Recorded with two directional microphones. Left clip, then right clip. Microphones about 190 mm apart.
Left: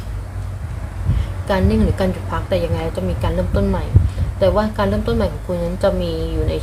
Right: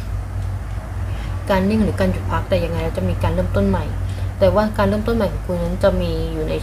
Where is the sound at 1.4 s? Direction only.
5° left (ahead or behind).